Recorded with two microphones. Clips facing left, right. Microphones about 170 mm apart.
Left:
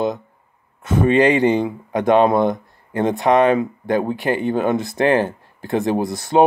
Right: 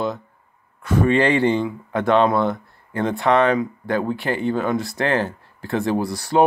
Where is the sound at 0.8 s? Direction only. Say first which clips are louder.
Left 3 dB; 20° left (ahead or behind).